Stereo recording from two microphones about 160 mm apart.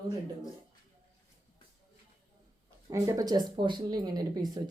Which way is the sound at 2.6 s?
20° right (ahead or behind).